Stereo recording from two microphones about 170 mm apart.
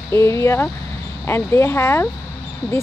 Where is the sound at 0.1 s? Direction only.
15° left (ahead or behind).